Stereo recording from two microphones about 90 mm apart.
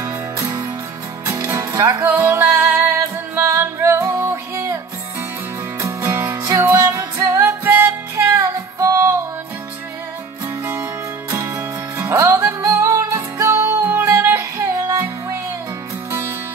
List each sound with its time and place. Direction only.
1.2 s music: 30° right (ahead or behind)
5.8 s music: 30° right (ahead or behind)
8.4 s music: 35° right (ahead or behind)
10.6 s music: 25° right (ahead or behind)
11.5 s music: 20° right (ahead or behind)